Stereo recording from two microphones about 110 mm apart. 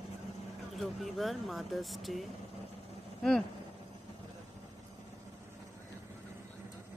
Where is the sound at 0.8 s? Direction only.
Centre (ahead or behind).